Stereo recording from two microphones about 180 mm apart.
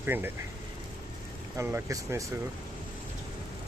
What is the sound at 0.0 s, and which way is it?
Speech, 10° right (ahead or behind).